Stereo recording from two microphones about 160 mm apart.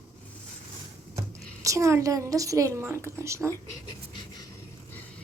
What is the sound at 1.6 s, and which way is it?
A woman's voice, 20° right (ahead or behind).